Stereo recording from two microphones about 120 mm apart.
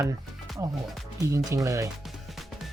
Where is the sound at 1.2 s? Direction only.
30° right (ahead or behind).